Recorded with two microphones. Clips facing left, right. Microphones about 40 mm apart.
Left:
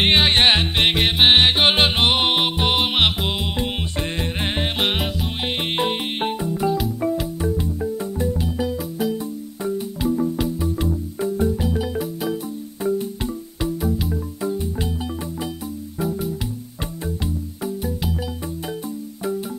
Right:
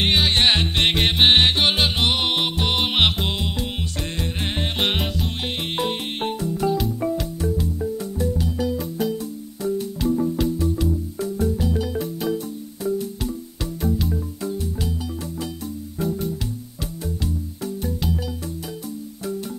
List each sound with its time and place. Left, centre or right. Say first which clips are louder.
0.0 s music: left 3 dB; left
0.5 s music: left 2 dB; centre
2.8 s music: left 1 dB; centre
4.2 s music: left 1 dB; left
4.7 s music: left 1 dB; centre
5.4 s music: left 4 dB; left
6.7 s music: left 1 dB; centre
7.4 s music: right 1 dB; left
12.0 s music: even; centre
13.7 s music: right 4 dB; centre
14.6 s music: left 2 dB; left
16.0 s music: left 1 dB; centre
17.6 s music: left 1 dB; centre